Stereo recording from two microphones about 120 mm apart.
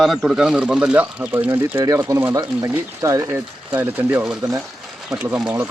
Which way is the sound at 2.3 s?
30° right (ahead or behind).